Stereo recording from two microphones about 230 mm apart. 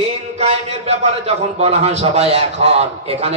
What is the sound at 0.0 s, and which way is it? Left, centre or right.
A man's voice, right.